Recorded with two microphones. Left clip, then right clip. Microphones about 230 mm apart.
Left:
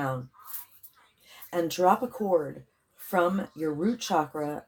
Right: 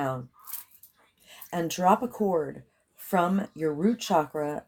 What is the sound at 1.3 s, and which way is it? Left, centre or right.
Speech, right.